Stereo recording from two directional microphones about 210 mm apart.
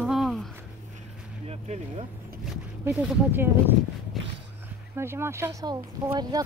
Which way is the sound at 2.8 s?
10° right (ahead or behind).